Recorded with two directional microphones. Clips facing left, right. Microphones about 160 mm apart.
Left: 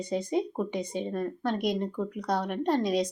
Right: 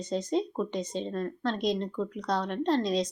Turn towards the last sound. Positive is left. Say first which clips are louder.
# left 1 dB
turn(degrees=60)  # may be behind; listen again after turning